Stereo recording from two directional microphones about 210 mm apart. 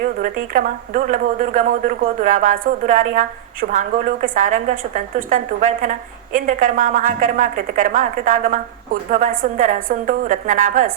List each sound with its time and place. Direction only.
0.2 s speech: 40° right (ahead or behind)